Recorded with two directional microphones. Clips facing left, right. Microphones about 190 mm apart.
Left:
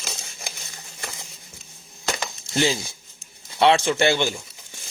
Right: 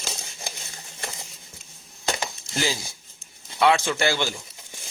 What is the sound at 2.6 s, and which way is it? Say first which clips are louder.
Speech: left 5 dB; 25° left (ahead or behind).